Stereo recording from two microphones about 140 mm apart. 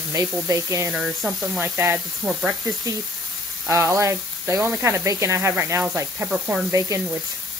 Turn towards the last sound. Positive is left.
turn(degrees=-25)  # may be behind; listen again after turning